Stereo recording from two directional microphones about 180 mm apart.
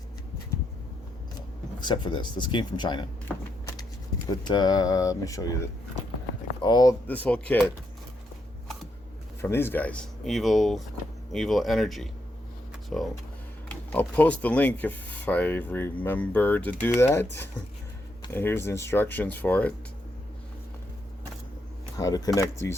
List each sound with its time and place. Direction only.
1.8 s speech: 25° left (ahead or behind)
4.4 s speech: 25° left (ahead or behind)
6.6 s speech: 25° left (ahead or behind)
7.1 s speech: 10° left (ahead or behind)
9.4 s speech: 15° left (ahead or behind)
18.3 s speech: 10° left (ahead or behind)
21.9 s speech: 20° left (ahead or behind)